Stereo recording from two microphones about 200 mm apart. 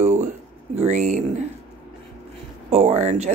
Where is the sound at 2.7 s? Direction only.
35° right (ahead or behind).